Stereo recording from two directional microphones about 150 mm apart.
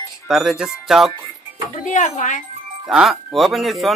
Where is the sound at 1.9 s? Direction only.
55° left (ahead or behind).